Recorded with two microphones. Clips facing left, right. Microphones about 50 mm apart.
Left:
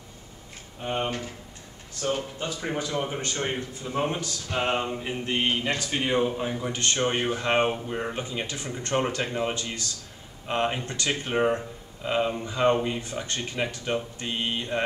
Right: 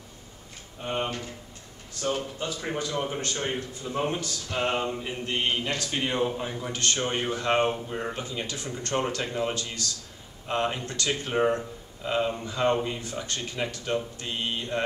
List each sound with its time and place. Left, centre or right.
0.8 s a man's voice: centre
6.8 s speech: left
8.2 s speech: left